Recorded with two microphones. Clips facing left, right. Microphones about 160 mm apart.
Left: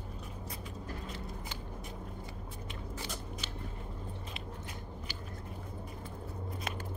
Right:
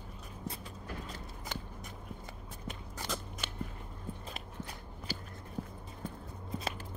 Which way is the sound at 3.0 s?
90° right.